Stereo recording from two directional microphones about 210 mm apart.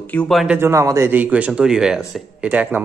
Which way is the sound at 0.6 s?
15° right (ahead or behind).